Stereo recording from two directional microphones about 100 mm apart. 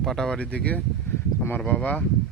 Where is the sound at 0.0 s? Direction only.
5° left (ahead or behind).